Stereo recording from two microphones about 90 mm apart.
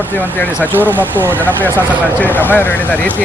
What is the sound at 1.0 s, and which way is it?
Speech, 20° right (ahead or behind).